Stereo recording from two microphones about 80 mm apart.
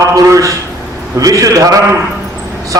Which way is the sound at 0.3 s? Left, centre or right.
Right.